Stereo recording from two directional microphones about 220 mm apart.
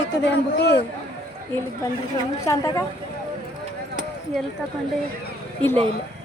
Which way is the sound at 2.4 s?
15° left (ahead or behind).